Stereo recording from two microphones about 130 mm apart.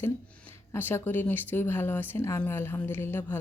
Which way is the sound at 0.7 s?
15° left (ahead or behind).